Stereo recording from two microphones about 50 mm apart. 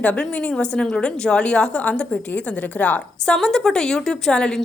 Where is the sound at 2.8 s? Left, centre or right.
Left.